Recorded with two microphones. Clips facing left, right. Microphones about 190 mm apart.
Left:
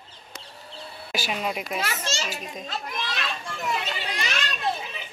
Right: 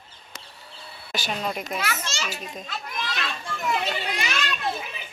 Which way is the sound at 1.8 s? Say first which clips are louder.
Left 1 dB; 30° left (ahead or behind).